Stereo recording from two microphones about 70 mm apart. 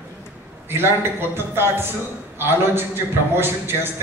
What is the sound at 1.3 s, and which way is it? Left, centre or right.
A man's voice, right.